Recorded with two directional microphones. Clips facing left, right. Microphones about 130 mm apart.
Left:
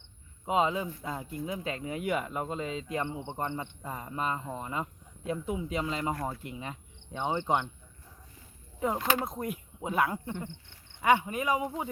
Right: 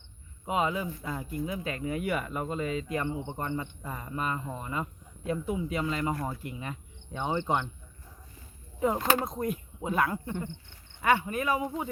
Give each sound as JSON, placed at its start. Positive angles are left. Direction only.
{"t": 0.4, "sound": "speech", "side_deg": 25}
{"t": 9.0, "sound": "speech", "side_deg": -40}
{"t": 9.2, "sound": "speech", "side_deg": 5}